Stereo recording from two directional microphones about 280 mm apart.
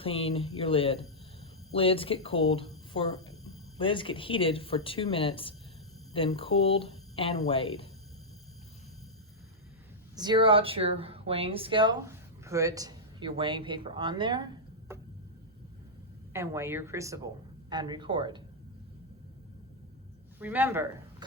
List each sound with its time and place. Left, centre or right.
0.0 s speech: left
3.8 s speech: centre
10.2 s speech: centre
16.3 s speech: centre
20.4 s speech: centre